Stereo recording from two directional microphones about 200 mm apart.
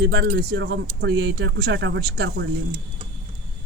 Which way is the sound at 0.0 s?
55° right (ahead or behind).